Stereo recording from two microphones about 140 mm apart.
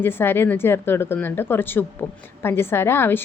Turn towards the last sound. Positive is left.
turn(degrees=15)  # may be behind; listen again after turning